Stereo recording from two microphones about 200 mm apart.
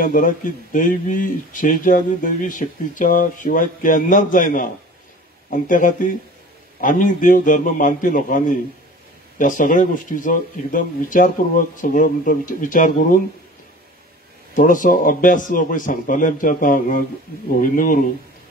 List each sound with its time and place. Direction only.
0.0 s speech: 40° left (ahead or behind)
14.5 s speech: 40° left (ahead or behind)